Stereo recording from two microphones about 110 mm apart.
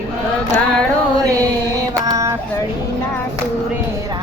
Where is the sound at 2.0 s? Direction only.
30° right (ahead or behind).